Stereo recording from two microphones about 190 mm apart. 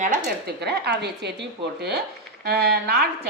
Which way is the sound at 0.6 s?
60° right (ahead or behind).